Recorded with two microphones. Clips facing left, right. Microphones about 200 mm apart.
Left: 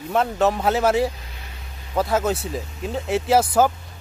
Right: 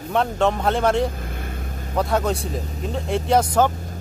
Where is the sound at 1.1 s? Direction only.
50° right (ahead or behind).